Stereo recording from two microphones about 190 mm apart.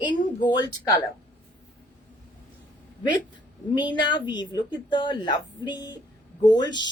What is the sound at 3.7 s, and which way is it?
A woman's voice, 25° left (ahead or behind).